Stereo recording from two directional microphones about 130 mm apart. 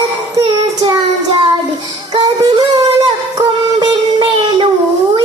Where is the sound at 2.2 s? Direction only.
40° right (ahead or behind).